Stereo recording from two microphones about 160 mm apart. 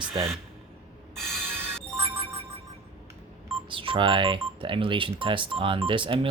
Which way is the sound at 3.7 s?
30° right (ahead or behind).